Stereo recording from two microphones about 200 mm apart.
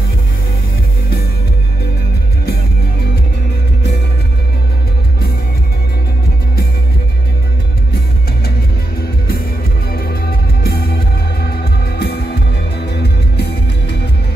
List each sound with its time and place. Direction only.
10.6 s music: 50° left (ahead or behind)